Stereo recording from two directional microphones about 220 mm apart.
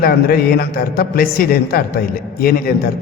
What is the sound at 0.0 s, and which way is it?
A man's voice, 45° left (ahead or behind).